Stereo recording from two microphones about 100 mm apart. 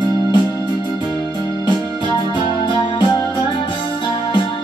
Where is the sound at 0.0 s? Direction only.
50° left (ahead or behind).